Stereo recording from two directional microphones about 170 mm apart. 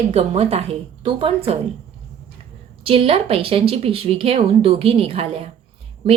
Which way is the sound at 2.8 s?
35° right (ahead or behind).